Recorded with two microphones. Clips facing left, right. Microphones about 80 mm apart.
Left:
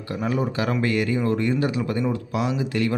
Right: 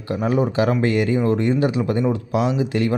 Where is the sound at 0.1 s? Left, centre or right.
Right.